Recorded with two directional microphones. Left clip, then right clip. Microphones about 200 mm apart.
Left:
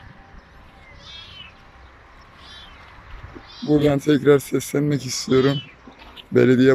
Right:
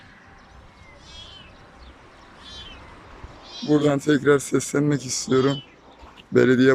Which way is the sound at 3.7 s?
Centre (ahead or behind).